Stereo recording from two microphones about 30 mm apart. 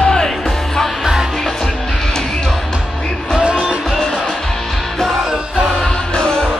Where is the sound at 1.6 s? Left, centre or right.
Left.